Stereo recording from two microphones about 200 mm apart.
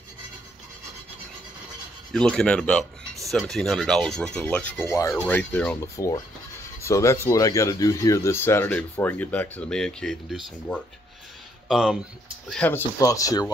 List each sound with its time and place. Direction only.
2.1 s speech: 5° left (ahead or behind)